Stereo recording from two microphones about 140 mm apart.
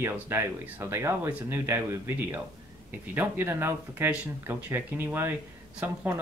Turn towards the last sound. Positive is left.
turn(degrees=-15)  # may be behind; listen again after turning